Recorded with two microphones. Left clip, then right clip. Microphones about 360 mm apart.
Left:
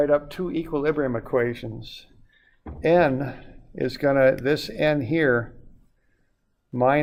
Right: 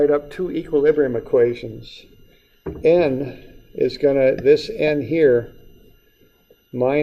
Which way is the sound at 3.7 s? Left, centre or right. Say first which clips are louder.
Right 5 dB; left.